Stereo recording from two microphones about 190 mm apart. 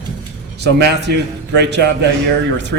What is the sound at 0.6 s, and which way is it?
A man's voice, 60° right (ahead or behind).